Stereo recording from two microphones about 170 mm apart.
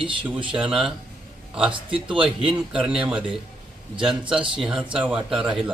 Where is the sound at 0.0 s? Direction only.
30° right (ahead or behind).